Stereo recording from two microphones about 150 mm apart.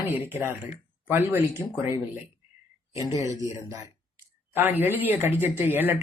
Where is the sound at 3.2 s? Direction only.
20° right (ahead or behind).